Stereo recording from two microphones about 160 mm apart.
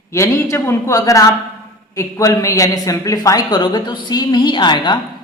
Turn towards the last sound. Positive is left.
turn(degrees=30)  # may be behind; listen again after turning